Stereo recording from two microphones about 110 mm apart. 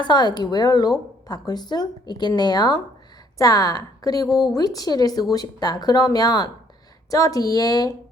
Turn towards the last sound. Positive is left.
turn(degrees=35)  # may be behind; listen again after turning